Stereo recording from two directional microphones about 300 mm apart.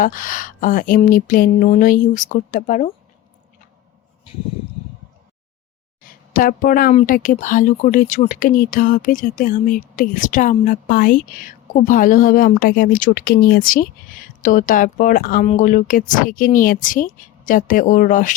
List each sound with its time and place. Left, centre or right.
0.0 s speech: left
6.0 s speech: left